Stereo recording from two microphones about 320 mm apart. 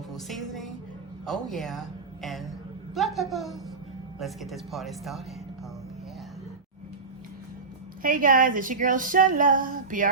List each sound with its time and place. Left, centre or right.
0.1 s music: centre
1.2 s a sound: centre
2.9 s speech: centre
8.0 s speech: right